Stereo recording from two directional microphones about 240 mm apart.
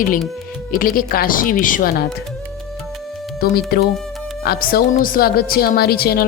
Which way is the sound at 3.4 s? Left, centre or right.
Left.